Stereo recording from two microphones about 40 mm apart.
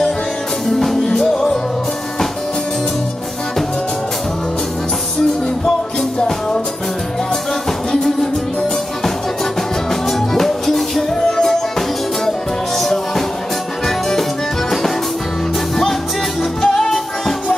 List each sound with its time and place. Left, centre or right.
0.7 s music: centre
6.1 s music: centre
7.9 s music: centre
10.0 s music: centre
16.6 s music: centre